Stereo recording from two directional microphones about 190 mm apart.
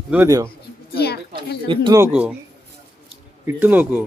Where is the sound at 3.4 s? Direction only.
10° right (ahead or behind).